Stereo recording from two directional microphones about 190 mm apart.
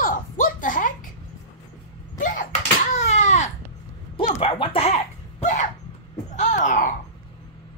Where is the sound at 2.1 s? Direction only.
40° left (ahead or behind).